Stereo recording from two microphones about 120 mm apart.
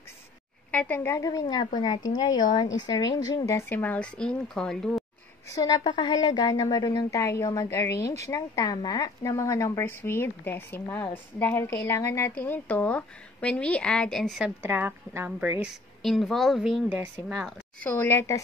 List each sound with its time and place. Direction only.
0.7 s a woman's voice: 15° left (ahead or behind)
1.1 s speech: 30° left (ahead or behind)
3.4 s speech: 20° left (ahead or behind)
5.5 s a woman's voice: 35° left (ahead or behind); by 14.3 s 5° left (ahead or behind)
14.6 s a woman's voice: 20° right (ahead or behind)
15.6 s a woman's voice: centre (ahead or behind)
17.8 s a woman's voice: 15° left (ahead or behind)